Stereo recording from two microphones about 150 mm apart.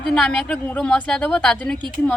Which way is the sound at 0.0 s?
5° left (ahead or behind).